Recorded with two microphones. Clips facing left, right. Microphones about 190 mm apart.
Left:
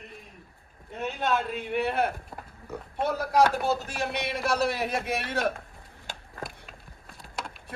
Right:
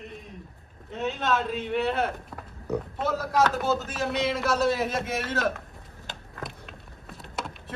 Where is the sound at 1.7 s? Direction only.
55° left (ahead or behind).